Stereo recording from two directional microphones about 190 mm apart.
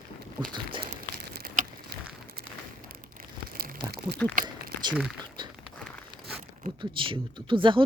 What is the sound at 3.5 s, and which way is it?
Crumpling, 50° right (ahead or behind).